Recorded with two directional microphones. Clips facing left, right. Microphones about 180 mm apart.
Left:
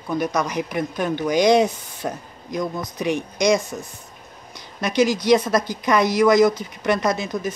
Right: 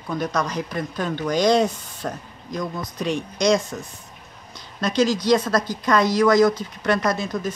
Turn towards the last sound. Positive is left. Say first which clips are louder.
# left 1 dB
turn(degrees=20)  # may be behind; listen again after turning